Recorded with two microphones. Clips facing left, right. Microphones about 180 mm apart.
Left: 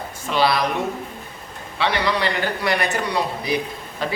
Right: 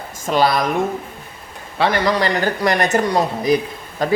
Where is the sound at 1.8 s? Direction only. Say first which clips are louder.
Right 4 dB; 45° right (ahead or behind).